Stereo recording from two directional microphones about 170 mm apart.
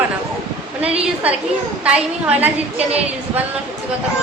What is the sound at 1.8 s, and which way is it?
A woman's voice, 5° right (ahead or behind).